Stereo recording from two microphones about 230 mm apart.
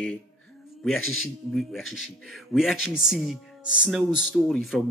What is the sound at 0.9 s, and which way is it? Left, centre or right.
Speech, left.